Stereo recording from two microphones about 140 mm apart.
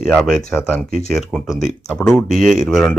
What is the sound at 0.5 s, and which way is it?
Speech, 15° left (ahead or behind).